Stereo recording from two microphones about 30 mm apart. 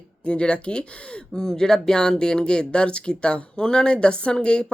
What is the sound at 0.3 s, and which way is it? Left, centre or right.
Speech, left.